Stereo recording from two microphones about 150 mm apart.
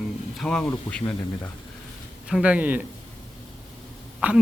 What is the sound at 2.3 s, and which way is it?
Speech, 10° right (ahead or behind).